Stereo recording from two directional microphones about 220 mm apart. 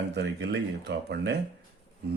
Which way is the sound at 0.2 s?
50° right (ahead or behind).